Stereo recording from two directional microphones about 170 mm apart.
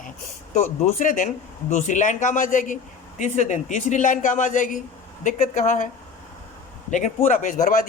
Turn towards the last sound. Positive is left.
turn(degrees=50)  # may be behind; listen again after turning